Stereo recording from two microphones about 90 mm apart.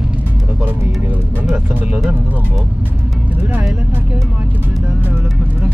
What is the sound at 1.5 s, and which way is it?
Speech, 15° right (ahead or behind).